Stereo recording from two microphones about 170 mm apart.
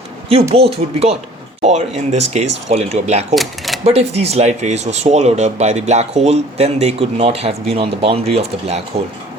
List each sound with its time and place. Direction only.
0.3 s speech: 35° right (ahead or behind)